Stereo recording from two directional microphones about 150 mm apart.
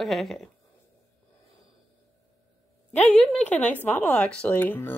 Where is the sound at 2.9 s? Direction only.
10° left (ahead or behind).